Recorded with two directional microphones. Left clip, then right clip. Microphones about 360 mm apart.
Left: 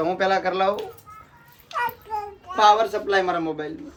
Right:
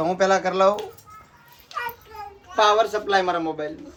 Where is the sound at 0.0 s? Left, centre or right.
Centre.